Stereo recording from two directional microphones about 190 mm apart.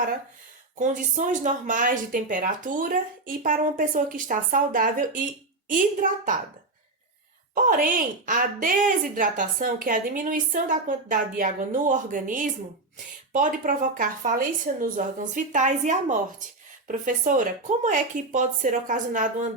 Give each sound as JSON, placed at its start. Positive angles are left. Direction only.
{"t": 0.8, "sound": "a woman's voice", "side_deg": -40}
{"t": 7.5, "sound": "a woman's voice", "side_deg": -45}